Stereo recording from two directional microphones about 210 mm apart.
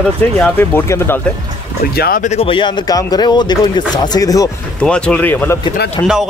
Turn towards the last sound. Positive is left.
turn(degrees=10)  # may be behind; listen again after turning